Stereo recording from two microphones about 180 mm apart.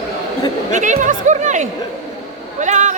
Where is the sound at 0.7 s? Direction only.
45° right (ahead or behind).